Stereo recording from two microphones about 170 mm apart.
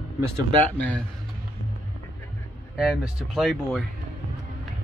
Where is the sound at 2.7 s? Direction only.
5° right (ahead or behind).